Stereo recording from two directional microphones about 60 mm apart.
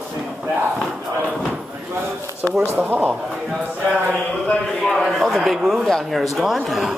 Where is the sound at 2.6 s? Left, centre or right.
Right.